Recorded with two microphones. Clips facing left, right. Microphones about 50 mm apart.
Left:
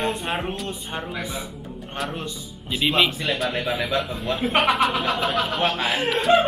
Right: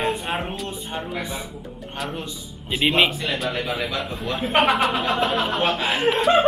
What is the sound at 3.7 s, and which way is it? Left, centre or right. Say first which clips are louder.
Speech: left 2 dB; centre.